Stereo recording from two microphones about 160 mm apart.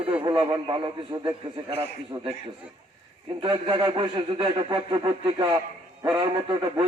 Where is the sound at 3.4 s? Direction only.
25° right (ahead or behind).